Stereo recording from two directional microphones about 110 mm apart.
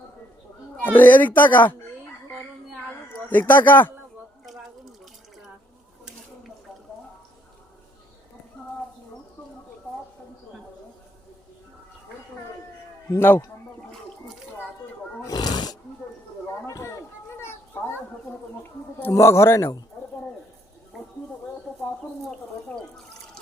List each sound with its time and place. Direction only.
0.9 s speech: 15° left (ahead or behind)
3.2 s speech: 15° left (ahead or behind)
13.1 s a man's voice: 20° left (ahead or behind)
15.2 s wild animals: 35° left (ahead or behind)
16.6 s a sound: 25° left (ahead or behind)
18.9 s a man's voice: 20° left (ahead or behind)
22.3 s a sound: 5° left (ahead or behind)